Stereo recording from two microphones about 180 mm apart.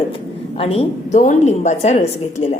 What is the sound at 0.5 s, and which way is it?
A woman's voice, 35° left (ahead or behind).